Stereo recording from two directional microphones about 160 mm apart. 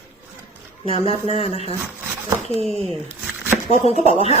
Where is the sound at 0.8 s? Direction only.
35° left (ahead or behind).